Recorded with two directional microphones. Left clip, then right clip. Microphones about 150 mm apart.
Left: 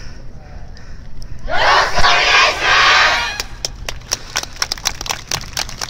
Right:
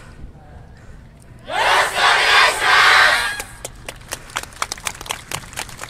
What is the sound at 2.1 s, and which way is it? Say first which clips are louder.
Crowd: left 2 dB; 15° right (ahead or behind).